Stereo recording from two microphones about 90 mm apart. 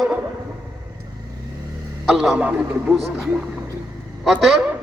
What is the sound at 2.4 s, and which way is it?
Speech, 15° right (ahead or behind).